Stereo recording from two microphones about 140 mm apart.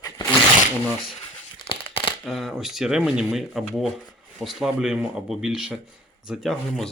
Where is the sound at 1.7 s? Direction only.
35° left (ahead or behind).